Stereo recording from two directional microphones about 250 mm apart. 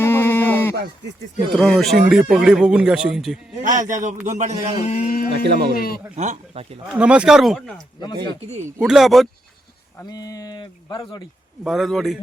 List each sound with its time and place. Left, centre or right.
0.0 s a sound: centre
1.5 s speech: centre
3.6 s a man's voice: right
4.8 s speech: left
5.5 s a man's voice: right
5.7 s speech: left
6.1 s speech: right
6.8 s speech: centre
8.4 s speech: right
8.8 s speech: centre
10.0 s speech: centre
11.6 s speech: centre